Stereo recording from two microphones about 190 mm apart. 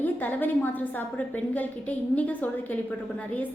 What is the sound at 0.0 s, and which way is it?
A woman's voice, 10° left (ahead or behind).